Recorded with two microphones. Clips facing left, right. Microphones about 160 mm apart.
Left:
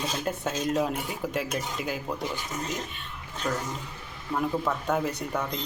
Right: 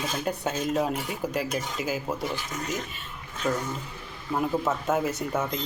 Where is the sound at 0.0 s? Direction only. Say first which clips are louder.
Right 1 dB; centre (ahead or behind).